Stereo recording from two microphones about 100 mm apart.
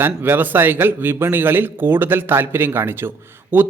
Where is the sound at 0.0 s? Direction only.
20° right (ahead or behind).